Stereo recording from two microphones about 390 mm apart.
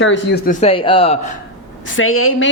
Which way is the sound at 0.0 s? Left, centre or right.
Left.